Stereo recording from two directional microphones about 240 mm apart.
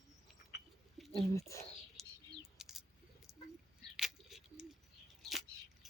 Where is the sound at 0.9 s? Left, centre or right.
Centre.